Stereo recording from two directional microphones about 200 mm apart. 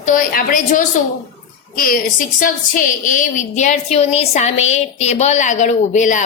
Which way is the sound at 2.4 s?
40° left (ahead or behind).